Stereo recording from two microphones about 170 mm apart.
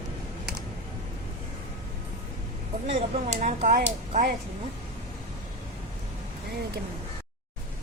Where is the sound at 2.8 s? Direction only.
40° right (ahead or behind).